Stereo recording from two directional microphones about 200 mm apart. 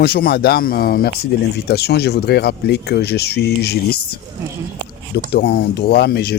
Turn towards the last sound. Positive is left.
turn(degrees=55)  # may be behind; listen again after turning